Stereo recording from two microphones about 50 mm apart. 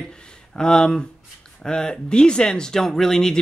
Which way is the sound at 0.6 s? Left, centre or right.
Centre.